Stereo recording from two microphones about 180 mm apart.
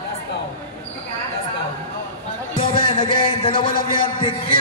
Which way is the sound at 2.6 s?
30° left (ahead or behind).